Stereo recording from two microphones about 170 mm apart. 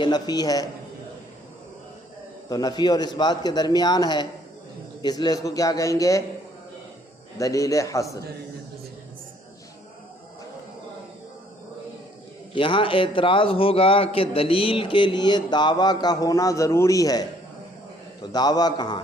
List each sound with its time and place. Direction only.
0.0 s a man's voice: 25° left (ahead or behind)
2.5 s a man's voice: 25° left (ahead or behind)
7.3 s a man's voice: 20° left (ahead or behind)
12.5 s a man's voice: 30° left (ahead or behind)